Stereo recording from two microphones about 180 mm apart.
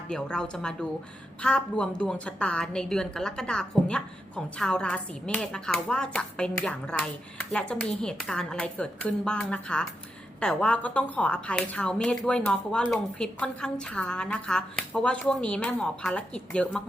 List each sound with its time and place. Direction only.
0.1 s a woman's voice: 5° left (ahead or behind)